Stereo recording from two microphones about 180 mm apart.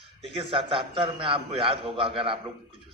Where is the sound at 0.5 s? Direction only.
30° right (ahead or behind).